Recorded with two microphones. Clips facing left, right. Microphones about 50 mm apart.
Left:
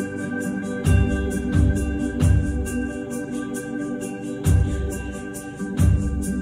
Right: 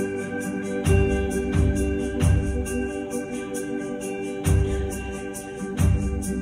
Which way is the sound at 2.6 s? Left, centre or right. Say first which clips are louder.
Left 1 dB; right.